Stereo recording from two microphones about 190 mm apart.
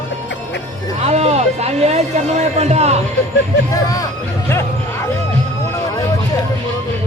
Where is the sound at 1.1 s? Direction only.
35° right (ahead or behind).